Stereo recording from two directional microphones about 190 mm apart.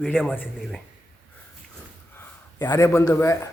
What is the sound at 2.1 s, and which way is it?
A man's voice, 15° left (ahead or behind).